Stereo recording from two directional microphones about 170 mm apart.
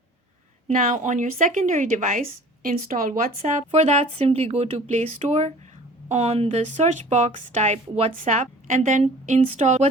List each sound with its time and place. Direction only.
0.7 s a woman's voice: 45° right (ahead or behind)
8.1 s a woman's voice: 50° right (ahead or behind)